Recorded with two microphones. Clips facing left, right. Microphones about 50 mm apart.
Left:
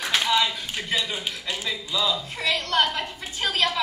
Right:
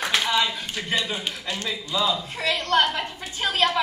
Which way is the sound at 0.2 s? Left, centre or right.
Centre.